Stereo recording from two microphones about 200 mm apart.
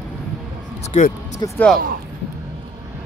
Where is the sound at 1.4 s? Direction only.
20° left (ahead or behind).